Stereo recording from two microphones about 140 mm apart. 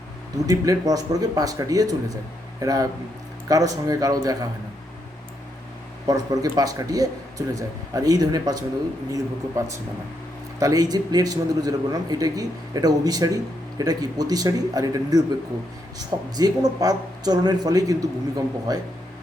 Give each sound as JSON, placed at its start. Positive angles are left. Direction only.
{"t": 0.4, "sound": "a man's voice", "side_deg": -25}
{"t": 6.1, "sound": "a man's voice", "side_deg": -25}